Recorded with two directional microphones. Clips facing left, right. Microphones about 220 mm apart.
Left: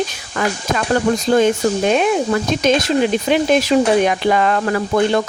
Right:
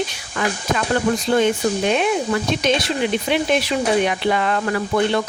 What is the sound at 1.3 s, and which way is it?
Speech, 40° left (ahead or behind).